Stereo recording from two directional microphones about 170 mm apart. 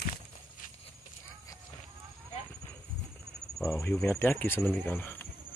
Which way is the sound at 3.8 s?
10° left (ahead or behind).